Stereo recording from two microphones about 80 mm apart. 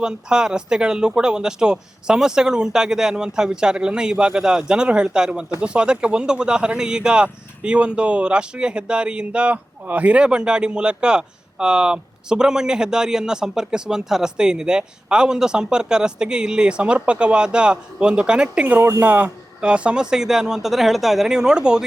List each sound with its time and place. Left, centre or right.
0.0 s speech: centre
18.8 s speech: right
19.0 s speech: centre